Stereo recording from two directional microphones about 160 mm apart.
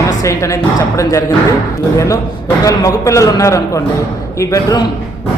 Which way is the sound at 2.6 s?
20° left (ahead or behind).